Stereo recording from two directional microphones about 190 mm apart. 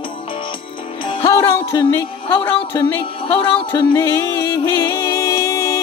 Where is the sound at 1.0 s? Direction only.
25° left (ahead or behind).